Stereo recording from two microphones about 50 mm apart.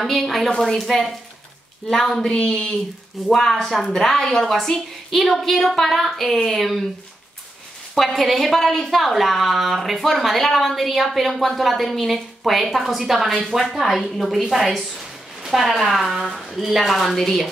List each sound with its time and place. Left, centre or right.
0.0 s a woman's voice: centre
7.9 s a woman's voice: centre